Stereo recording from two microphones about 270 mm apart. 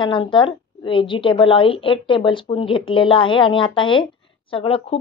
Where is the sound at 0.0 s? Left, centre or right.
Centre.